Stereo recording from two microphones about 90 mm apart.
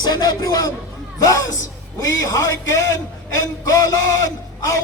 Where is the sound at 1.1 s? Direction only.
40° left (ahead or behind).